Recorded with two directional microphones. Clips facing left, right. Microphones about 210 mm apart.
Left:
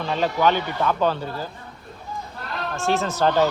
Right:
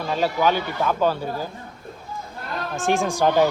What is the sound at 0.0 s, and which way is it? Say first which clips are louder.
Speech: even; 5° right (ahead or behind).